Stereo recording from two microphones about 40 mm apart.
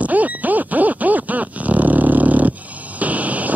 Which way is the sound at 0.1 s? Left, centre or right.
Right.